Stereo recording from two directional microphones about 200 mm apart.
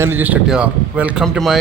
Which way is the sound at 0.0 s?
10° right (ahead or behind).